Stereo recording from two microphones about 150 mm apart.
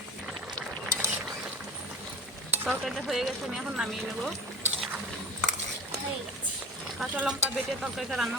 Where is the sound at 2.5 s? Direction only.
15° right (ahead or behind).